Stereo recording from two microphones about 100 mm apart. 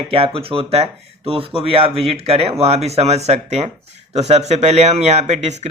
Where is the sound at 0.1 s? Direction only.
70° right (ahead or behind).